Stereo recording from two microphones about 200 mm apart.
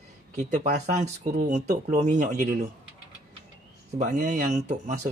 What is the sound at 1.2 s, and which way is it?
Speech, 55° right (ahead or behind).